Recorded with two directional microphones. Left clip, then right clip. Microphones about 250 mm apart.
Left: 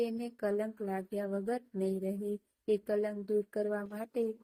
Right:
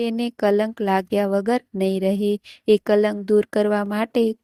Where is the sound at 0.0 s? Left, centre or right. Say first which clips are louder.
Right 13 dB; right.